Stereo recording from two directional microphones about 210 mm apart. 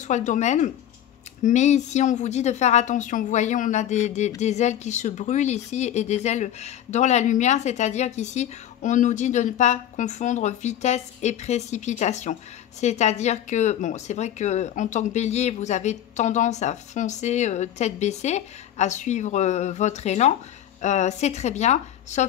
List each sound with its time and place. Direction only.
0.0 s speech: 35° left (ahead or behind)